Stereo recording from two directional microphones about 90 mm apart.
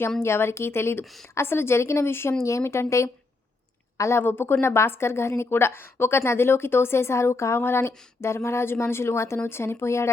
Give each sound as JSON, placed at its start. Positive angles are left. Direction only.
{"t": 0.2, "sound": "a woman's voice", "side_deg": 30}
{"t": 1.0, "sound": "a woman's voice", "side_deg": 0}
{"t": 1.4, "sound": "a woman's voice", "side_deg": 25}